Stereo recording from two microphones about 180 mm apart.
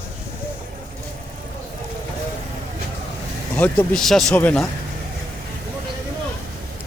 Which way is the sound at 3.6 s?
5° left (ahead or behind).